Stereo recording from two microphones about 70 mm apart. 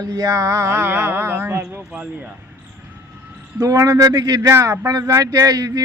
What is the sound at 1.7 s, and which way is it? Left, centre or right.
Speech, centre.